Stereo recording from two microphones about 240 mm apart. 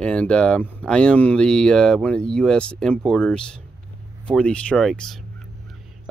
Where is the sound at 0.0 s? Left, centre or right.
Centre.